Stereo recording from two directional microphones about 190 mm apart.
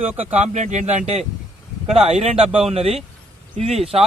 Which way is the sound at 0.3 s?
35° right (ahead or behind).